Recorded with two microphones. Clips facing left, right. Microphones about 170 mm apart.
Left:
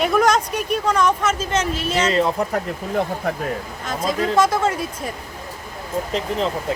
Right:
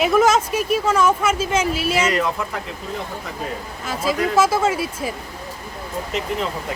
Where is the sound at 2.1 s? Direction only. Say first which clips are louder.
Left 3 dB; 30° left (ahead or behind).